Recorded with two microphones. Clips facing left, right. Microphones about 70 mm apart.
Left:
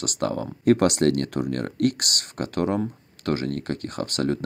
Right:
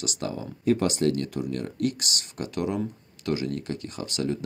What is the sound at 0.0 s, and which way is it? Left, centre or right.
Speech, left.